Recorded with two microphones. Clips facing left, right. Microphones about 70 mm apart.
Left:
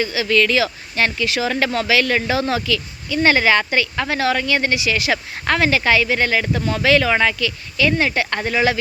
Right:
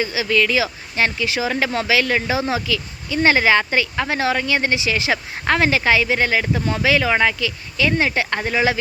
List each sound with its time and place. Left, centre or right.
0.0 s speech: right